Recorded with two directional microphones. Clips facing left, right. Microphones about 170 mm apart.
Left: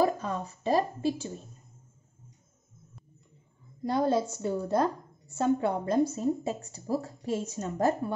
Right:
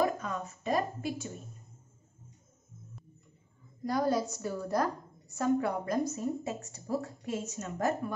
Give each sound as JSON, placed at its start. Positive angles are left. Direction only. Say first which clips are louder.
{"t": 0.0, "sound": "a woman's voice", "louder": "left 3 dB", "side_deg": 30}
{"t": 3.8, "sound": "a woman's voice", "louder": "left 3 dB", "side_deg": 25}